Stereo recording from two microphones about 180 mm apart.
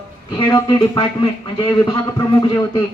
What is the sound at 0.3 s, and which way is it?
A man's voice, 25° left (ahead or behind).